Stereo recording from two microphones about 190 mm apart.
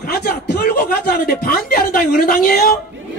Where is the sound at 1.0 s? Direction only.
50° left (ahead or behind).